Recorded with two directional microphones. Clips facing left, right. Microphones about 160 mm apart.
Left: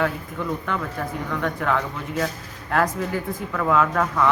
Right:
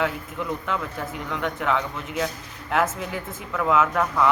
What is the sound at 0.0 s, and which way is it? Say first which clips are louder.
Speech: left 2 dB; 5° right (ahead or behind).